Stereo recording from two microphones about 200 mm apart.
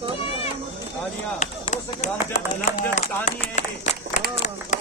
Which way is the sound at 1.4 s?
35° left (ahead or behind).